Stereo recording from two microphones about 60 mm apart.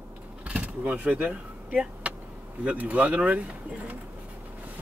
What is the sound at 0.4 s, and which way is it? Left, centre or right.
Vehicle, right.